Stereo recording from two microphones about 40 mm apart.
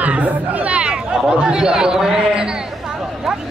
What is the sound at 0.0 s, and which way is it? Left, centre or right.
Speech, right.